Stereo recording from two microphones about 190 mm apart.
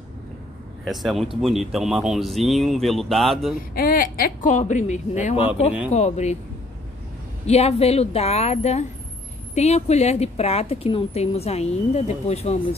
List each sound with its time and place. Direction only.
0.8 s speech: centre (ahead or behind)
3.7 s a woman's voice: 50° left (ahead or behind)
7.4 s a woman's voice: 35° left (ahead or behind)